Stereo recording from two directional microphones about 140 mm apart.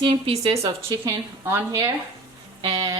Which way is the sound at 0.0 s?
45° right (ahead or behind).